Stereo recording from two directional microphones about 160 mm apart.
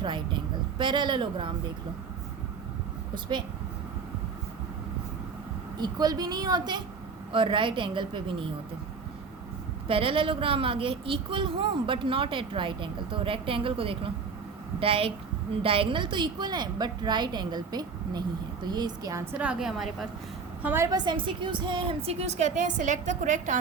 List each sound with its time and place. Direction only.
0.0 s a woman's voice: 30° right (ahead or behind)
5.7 s a woman's voice: 25° right (ahead or behind)
9.8 s a woman's voice: 35° right (ahead or behind)
19.4 s a woman's voice: 5° right (ahead or behind)
20.6 s a woman's voice: 15° right (ahead or behind); by 23.6 s 50° right (ahead or behind)